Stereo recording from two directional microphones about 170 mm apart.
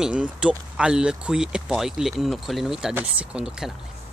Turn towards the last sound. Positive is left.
turn(degrees=-5)  # may be behind; listen again after turning